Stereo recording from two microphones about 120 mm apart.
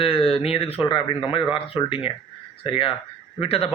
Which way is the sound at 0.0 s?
50° left (ahead or behind).